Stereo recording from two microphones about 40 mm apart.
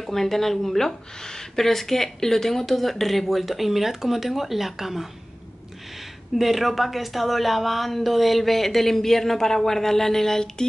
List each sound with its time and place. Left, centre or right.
0.0 s speech: centre
6.3 s speech: centre